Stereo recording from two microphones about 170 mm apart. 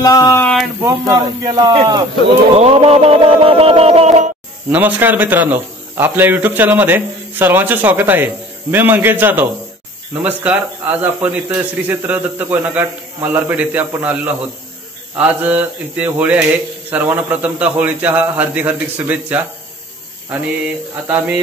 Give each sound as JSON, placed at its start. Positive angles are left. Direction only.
{"t": 0.0, "sound": "speech", "side_deg": 20}
{"t": 0.7, "sound": "speech", "side_deg": -20}
{"t": 2.5, "sound": "a sound", "side_deg": -35}
{"t": 4.6, "sound": "a man's voice", "side_deg": -10}